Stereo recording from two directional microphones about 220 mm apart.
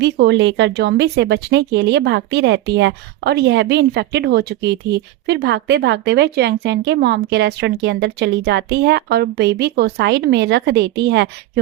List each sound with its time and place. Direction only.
0.0 s speech: 50° right (ahead or behind)